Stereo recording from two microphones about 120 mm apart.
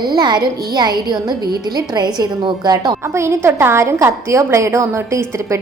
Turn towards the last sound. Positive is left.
turn(degrees=-20)  # may be behind; listen again after turning